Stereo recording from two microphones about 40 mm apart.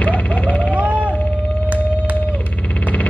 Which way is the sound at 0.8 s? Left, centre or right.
Right.